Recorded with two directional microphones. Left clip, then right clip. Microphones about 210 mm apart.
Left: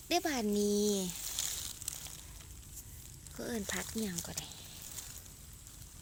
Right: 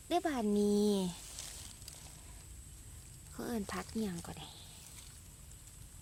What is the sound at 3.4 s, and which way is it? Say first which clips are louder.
Speech: left 2 dB; 15° right (ahead or behind).